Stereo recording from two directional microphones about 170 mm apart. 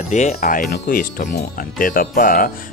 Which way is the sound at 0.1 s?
45° left (ahead or behind).